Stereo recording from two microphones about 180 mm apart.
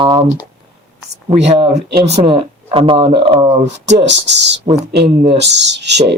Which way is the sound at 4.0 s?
75° right (ahead or behind).